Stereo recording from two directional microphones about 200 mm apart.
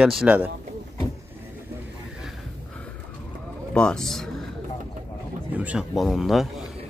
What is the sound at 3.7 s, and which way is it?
Speech, 5° left (ahead or behind).